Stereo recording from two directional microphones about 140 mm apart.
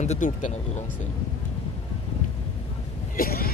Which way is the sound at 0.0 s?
65° left (ahead or behind).